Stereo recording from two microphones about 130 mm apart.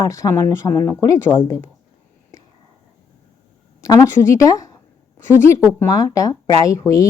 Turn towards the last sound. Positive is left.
turn(degrees=25)  # may be behind; listen again after turning